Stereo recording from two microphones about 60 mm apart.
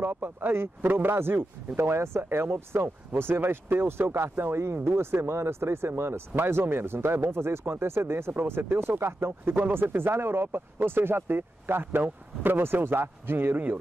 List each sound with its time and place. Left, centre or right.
0.0 s speech: right